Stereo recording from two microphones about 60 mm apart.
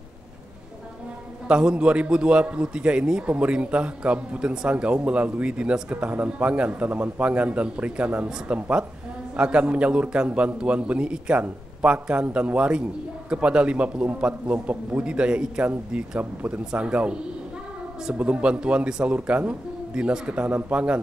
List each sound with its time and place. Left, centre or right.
1.5 s a man's voice: centre